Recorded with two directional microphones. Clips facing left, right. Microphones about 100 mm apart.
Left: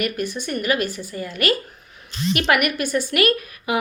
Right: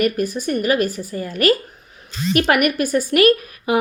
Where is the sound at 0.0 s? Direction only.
40° right (ahead or behind).